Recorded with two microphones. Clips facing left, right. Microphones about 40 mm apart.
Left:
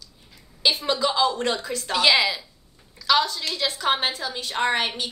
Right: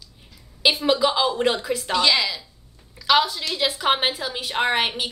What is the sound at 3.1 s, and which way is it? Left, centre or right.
A woman's voice, centre.